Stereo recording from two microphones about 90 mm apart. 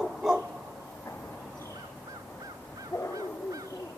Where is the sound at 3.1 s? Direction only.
40° right (ahead or behind).